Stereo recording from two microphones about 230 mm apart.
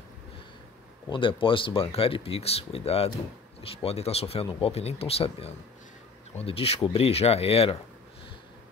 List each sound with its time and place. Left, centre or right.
1.1 s speech: left